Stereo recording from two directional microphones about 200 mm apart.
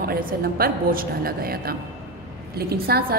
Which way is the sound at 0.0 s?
45° right (ahead or behind).